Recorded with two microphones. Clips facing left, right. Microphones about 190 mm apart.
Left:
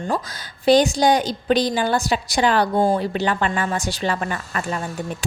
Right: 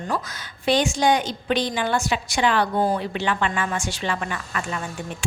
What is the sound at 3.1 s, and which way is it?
A woman's voice, 40° left (ahead or behind).